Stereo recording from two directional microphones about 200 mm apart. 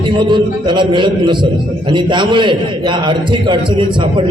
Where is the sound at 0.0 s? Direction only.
25° right (ahead or behind).